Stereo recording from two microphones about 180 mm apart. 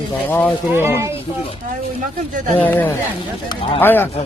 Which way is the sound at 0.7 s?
15° right (ahead or behind).